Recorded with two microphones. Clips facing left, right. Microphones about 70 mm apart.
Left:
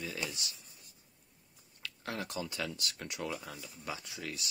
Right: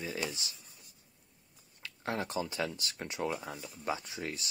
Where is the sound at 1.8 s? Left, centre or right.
Right.